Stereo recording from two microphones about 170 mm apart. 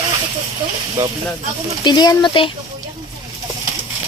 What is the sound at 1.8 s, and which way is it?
Speech, 25° left (ahead or behind).